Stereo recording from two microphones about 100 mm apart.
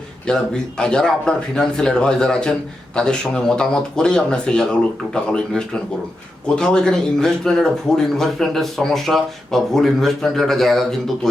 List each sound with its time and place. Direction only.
0.3 s speech: 10° left (ahead or behind)